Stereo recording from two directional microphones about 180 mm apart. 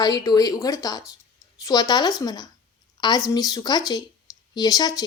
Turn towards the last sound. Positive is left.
turn(degrees=20)  # may be behind; listen again after turning